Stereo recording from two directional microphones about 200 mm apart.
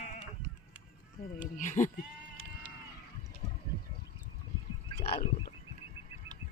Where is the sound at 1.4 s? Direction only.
40° left (ahead or behind).